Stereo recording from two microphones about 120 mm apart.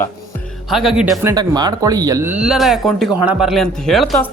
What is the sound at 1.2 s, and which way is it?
Speech, 30° right (ahead or behind).